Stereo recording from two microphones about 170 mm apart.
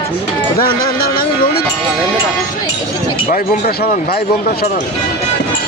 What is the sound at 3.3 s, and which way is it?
Speech, 60° left (ahead or behind).